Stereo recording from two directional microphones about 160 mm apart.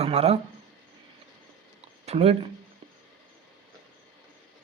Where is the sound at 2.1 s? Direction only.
40° right (ahead or behind).